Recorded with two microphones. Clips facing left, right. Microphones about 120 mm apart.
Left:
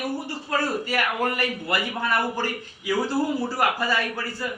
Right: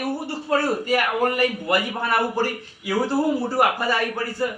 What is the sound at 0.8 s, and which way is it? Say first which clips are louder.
Speech: right 4 dB; 45° right (ahead or behind).